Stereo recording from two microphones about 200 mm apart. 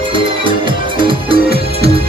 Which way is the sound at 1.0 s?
25° right (ahead or behind).